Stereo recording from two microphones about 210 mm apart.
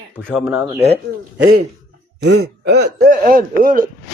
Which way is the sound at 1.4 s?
80° right.